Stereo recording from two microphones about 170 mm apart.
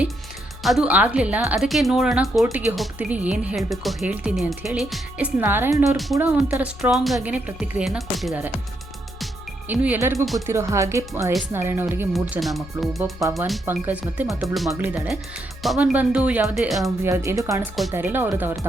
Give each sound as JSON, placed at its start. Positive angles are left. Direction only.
{"t": 0.6, "sound": "speech", "side_deg": 0}
{"t": 9.6, "sound": "speech", "side_deg": -10}
{"t": 12.3, "sound": "speech", "side_deg": 0}
{"t": 14.7, "sound": "speech", "side_deg": -10}
{"t": 17.0, "sound": "speech", "side_deg": -15}